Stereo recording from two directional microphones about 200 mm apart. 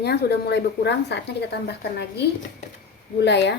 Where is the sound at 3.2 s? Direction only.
60° left (ahead or behind).